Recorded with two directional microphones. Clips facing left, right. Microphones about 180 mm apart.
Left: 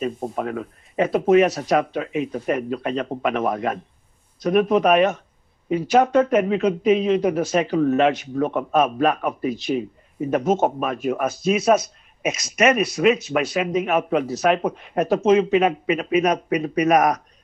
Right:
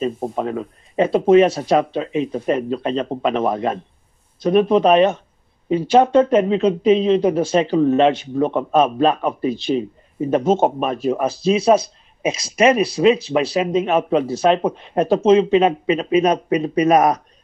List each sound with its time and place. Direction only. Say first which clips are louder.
0.4 s speech: right 3 dB; 30° right (ahead or behind)